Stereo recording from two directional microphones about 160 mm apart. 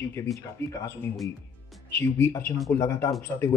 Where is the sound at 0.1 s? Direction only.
15° left (ahead or behind).